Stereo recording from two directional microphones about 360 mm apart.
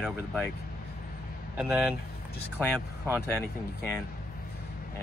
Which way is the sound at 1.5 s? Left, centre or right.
Centre.